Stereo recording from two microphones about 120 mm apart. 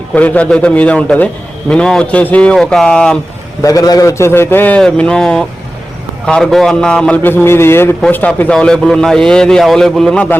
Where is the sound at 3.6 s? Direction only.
30° left (ahead or behind).